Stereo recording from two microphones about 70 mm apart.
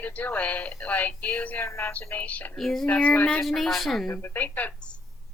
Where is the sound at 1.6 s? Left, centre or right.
Left.